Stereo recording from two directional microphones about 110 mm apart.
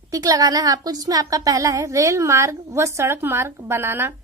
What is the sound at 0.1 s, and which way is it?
A woman's voice, 35° right (ahead or behind).